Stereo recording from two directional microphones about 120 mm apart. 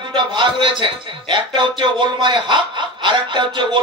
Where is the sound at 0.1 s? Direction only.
40° right (ahead or behind).